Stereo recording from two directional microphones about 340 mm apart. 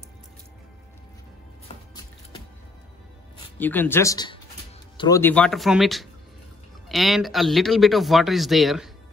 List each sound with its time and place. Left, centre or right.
1.7 s music: centre
3.4 s speech: centre